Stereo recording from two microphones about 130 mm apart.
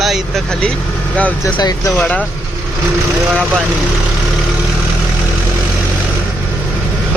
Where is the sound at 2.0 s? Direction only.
10° left (ahead or behind).